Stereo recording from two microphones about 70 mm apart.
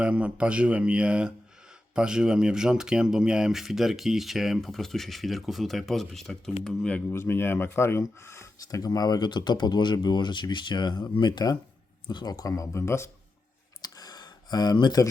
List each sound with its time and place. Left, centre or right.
0.0 s a man's voice: centre
7.1 s speech: left
8.6 s speech: left
12.0 s speech: left
13.8 s a sound: left